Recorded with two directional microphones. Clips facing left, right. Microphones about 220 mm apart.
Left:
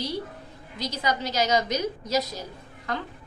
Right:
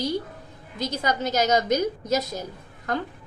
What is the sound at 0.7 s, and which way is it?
A woman's voice, 50° right (ahead or behind).